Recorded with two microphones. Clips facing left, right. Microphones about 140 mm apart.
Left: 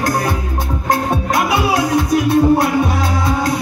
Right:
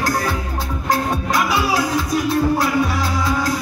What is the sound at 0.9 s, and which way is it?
Music, 55° left (ahead or behind).